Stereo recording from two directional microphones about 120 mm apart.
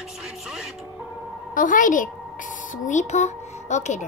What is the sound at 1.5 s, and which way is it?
Speech, 90° left.